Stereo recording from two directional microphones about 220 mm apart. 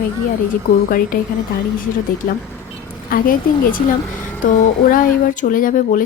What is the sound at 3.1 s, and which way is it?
Speech, 40° left (ahead or behind).